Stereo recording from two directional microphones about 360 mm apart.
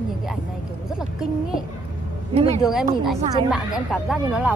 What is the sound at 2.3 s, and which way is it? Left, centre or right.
Speech, centre.